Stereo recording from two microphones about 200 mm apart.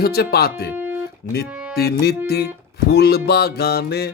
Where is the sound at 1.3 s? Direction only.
50° left (ahead or behind).